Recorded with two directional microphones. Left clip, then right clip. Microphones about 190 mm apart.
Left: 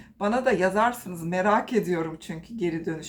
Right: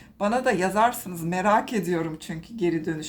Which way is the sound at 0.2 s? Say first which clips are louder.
Even; 30° right (ahead or behind).